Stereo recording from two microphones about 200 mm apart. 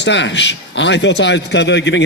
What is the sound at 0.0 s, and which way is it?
A man's voice, 65° left (ahead or behind).